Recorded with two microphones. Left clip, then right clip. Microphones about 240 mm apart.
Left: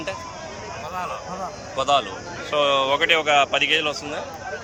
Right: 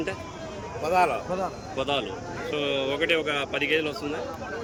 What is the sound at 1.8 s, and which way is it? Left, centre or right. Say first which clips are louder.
A man's voice: left 7 dB; centre.